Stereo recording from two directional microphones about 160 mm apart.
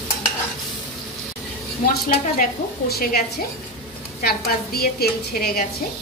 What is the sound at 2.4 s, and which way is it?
Speech, 75° left (ahead or behind).